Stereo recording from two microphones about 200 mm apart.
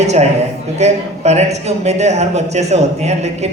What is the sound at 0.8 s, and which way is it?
A man's voice, 35° right (ahead or behind).